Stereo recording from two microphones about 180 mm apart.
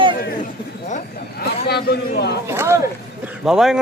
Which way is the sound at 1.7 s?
65° left (ahead or behind).